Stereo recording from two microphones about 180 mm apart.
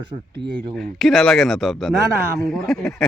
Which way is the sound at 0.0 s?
25° right (ahead or behind).